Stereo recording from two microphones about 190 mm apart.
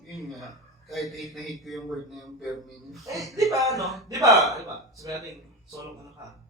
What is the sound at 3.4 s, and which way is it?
Speech, 15° right (ahead or behind).